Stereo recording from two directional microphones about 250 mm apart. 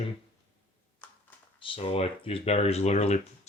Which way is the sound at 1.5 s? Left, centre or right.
Left.